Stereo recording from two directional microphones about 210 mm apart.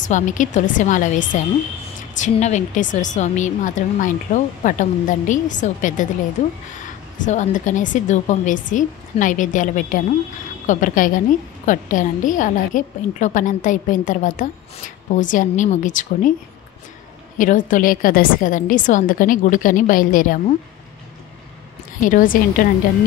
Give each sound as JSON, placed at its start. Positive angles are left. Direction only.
{"t": 0.1, "sound": "a woman's voice", "side_deg": 35}
{"t": 7.2, "sound": "a woman's voice", "side_deg": 35}
{"t": 17.4, "sound": "a woman's voice", "side_deg": 40}
{"t": 22.0, "sound": "a woman's voice", "side_deg": 40}